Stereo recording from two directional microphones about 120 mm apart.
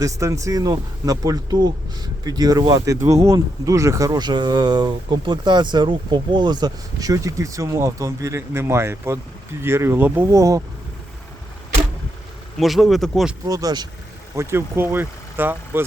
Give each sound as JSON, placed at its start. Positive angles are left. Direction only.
{"t": 0.0, "sound": "speech", "side_deg": -25}
{"t": 12.5, "sound": "speech", "side_deg": 0}
{"t": 13.4, "sound": "speech", "side_deg": -30}
{"t": 14.3, "sound": "speech", "side_deg": -20}